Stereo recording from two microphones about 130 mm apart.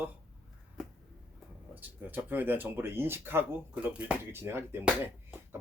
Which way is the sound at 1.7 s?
15° right (ahead or behind).